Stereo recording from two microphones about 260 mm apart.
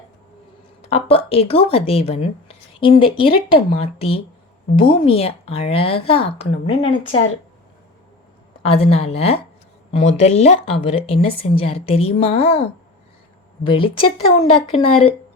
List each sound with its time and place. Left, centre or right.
0.8 s a woman's voice: left
8.6 s a woman's voice: left
13.7 s a woman's voice: centre